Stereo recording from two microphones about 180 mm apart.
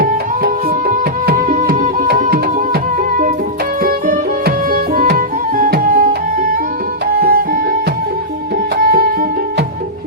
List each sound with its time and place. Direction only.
0.0 s music: 55° right (ahead or behind)
3.8 s music: 50° right (ahead or behind)
7.2 s music: 60° right (ahead or behind)
8.8 s music: 55° right (ahead or behind)